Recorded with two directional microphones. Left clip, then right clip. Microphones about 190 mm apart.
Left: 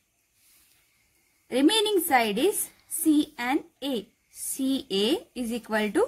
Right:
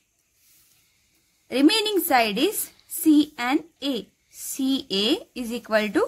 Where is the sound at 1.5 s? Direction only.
25° right (ahead or behind).